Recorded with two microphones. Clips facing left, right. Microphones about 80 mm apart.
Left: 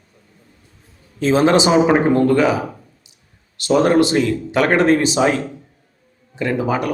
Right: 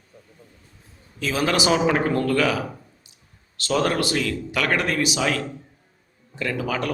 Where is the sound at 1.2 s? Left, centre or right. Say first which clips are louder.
Left 9 dB; left.